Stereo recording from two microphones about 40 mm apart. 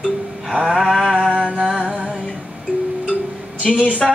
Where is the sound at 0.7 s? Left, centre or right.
Centre.